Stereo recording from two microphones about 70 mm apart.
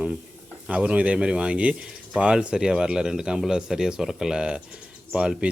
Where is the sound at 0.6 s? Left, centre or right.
Centre.